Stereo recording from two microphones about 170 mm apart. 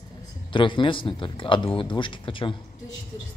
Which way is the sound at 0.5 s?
30° left (ahead or behind).